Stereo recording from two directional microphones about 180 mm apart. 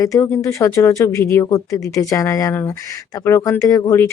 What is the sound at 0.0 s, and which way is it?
Speech, 15° left (ahead or behind).